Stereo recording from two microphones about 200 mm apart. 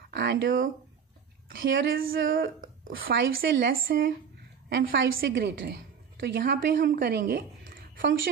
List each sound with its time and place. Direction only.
0.1 s a sound: 55° right (ahead or behind)
1.6 s a woman's voice: 70° right (ahead or behind)
2.3 s a woman's voice: 50° right (ahead or behind)